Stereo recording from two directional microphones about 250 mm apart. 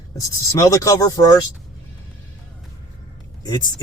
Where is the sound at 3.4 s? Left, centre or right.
Centre.